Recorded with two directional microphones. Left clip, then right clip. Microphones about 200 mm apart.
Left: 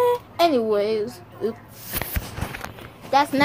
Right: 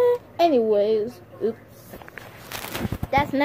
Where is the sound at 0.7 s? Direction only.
20° right (ahead or behind).